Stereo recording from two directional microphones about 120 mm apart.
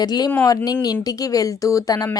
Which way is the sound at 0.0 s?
35° left (ahead or behind).